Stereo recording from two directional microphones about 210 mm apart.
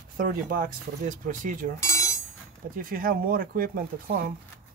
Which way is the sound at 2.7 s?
40° right (ahead or behind).